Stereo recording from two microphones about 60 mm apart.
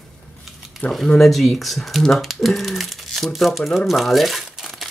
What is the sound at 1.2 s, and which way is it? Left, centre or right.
Speech, centre.